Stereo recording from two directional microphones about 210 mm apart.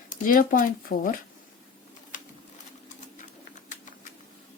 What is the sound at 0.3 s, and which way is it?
Speech, 40° left (ahead or behind).